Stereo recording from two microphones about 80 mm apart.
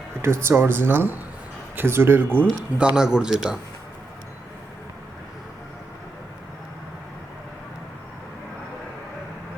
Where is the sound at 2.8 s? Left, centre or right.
Centre.